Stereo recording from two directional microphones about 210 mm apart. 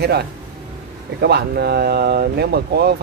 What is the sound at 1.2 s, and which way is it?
Speech, 50° right (ahead or behind).